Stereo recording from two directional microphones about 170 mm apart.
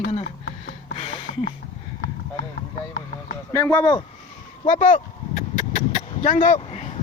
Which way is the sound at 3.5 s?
15° left (ahead or behind).